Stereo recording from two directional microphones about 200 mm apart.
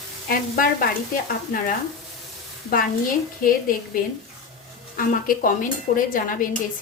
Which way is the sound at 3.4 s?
45° left (ahead or behind).